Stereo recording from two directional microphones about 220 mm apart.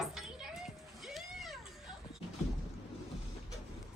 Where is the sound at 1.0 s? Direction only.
Centre (ahead or behind).